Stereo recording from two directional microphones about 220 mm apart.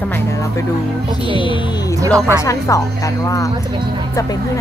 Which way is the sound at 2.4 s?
15° left (ahead or behind).